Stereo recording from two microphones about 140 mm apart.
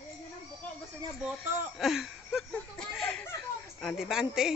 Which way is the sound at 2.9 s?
10° left (ahead or behind).